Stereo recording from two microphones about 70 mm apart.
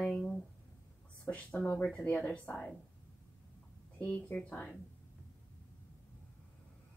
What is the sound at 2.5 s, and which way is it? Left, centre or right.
Speech, left.